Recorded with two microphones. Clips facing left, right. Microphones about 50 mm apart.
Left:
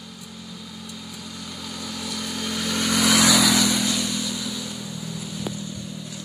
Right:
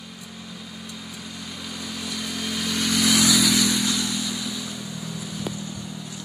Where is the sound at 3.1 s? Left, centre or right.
Left.